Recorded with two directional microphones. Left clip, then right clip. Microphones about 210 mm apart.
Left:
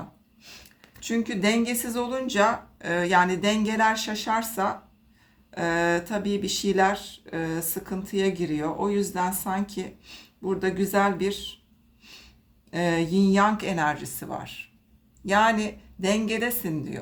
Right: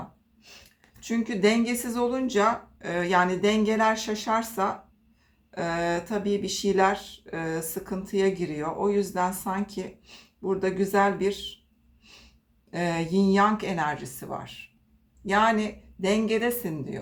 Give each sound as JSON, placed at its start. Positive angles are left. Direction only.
{"t": 1.0, "sound": "speech", "side_deg": 25}
{"t": 12.1, "sound": "sniff", "side_deg": 25}
{"t": 12.7, "sound": "speech", "side_deg": 25}